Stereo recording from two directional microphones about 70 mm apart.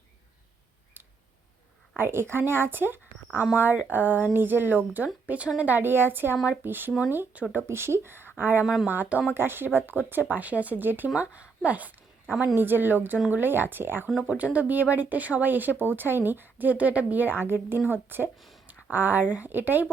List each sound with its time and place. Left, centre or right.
2.0 s speech: right
8.6 s speech: centre
8.9 s speech: right
14.3 s speech: centre
18.3 s speech: centre
18.7 s speech: right